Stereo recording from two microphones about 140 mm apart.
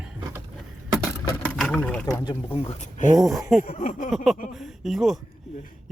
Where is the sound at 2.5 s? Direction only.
50° left (ahead or behind).